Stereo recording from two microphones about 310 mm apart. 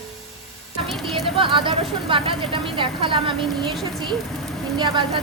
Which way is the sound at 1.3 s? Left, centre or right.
Centre.